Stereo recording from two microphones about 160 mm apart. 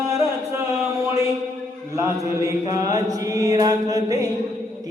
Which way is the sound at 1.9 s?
15° right (ahead or behind).